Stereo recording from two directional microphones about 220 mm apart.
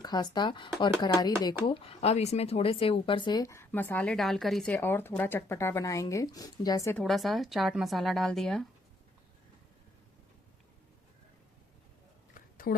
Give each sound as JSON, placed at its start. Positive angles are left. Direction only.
{"t": 0.0, "sound": "speech", "side_deg": 20}
{"t": 7.0, "sound": "speech", "side_deg": 0}
{"t": 12.3, "sound": "a sound", "side_deg": 40}